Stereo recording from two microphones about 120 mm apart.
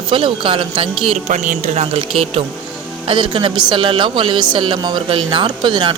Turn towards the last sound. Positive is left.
turn(degrees=-40)  # may be behind; listen again after turning